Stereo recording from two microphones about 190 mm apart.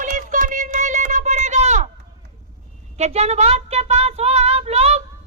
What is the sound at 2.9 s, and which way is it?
Speech, 35° right (ahead or behind).